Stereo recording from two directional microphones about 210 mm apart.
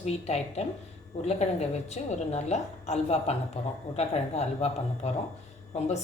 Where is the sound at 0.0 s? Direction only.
30° left (ahead or behind).